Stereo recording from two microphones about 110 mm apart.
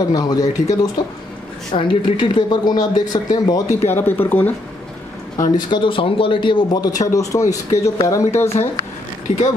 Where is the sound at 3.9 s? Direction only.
20° left (ahead or behind).